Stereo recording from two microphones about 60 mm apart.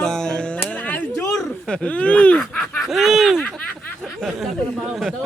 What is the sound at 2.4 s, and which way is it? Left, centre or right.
Snicker, centre.